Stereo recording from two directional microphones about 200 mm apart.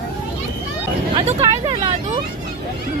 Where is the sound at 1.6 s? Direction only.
30° right (ahead or behind).